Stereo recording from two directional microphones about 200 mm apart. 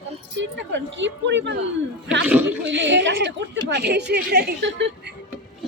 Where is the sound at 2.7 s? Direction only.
65° right (ahead or behind).